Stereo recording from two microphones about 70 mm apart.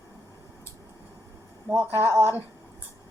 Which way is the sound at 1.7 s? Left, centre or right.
Right.